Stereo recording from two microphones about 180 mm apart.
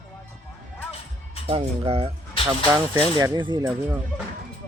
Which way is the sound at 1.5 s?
30° right (ahead or behind).